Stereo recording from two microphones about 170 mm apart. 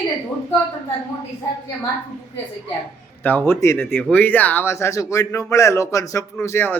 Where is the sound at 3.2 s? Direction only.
10° left (ahead or behind).